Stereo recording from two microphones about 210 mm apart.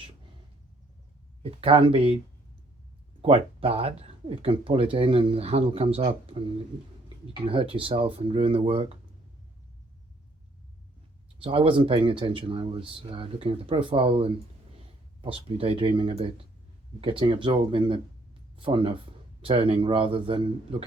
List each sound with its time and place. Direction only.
1.4 s speech: 25° right (ahead or behind)
3.2 s speech: 25° right (ahead or behind)
7.4 s speech: 25° right (ahead or behind)
11.3 s speech: 25° right (ahead or behind)